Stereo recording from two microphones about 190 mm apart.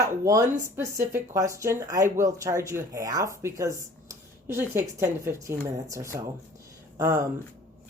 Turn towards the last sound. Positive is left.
turn(degrees=-20)  # may be behind; listen again after turning